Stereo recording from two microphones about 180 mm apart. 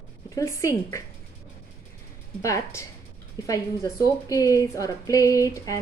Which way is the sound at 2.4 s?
15° left (ahead or behind).